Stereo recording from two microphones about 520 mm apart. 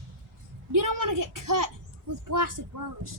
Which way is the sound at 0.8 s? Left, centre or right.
Right.